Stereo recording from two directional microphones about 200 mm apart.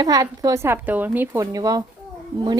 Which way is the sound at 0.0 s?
20° right (ahead or behind).